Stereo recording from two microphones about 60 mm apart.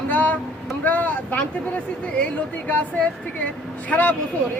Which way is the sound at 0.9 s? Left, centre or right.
Left.